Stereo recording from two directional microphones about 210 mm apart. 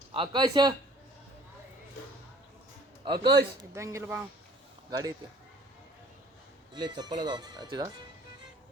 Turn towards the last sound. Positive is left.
turn(degrees=-20)  # may be behind; listen again after turning